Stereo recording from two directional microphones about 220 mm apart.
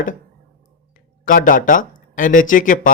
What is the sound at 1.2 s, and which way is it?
Speech, 35° left (ahead or behind).